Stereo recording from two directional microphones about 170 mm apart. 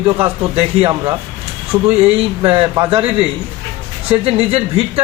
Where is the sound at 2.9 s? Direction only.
35° right (ahead or behind).